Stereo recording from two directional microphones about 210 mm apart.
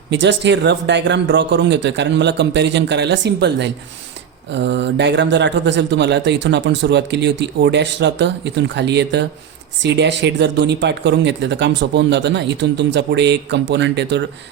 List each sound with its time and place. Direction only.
0.1 s speech: 60° right (ahead or behind)